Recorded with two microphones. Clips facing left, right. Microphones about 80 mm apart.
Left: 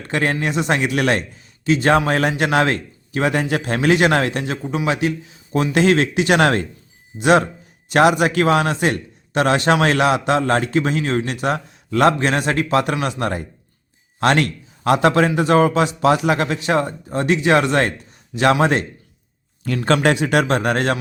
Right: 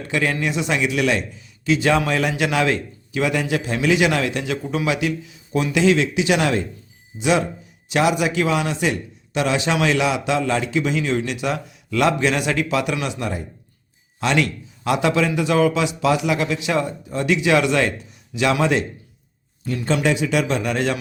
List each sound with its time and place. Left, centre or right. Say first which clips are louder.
0.0 s a man's voice: left 1 dB; left
4.6 s a man's voice: left 1 dB; centre
4.9 s speech: left 4 dB; left
5.7 s a man's voice: left 1 dB; left
19.6 s a man's voice: left 4 dB; left